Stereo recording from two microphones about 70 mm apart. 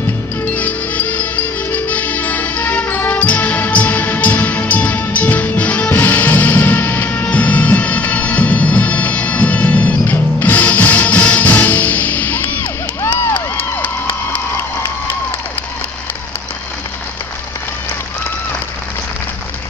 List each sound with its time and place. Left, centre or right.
0.5 s music: left